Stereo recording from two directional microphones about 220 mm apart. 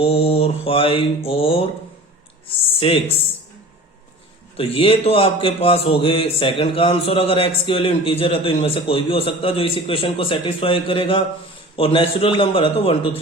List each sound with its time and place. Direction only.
0.0 s a man's voice: 25° left (ahead or behind)
2.7 s speech: 25° left (ahead or behind)
4.5 s a man's voice: 25° left (ahead or behind)